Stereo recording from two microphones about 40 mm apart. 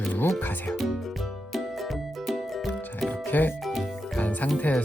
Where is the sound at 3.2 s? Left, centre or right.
Left.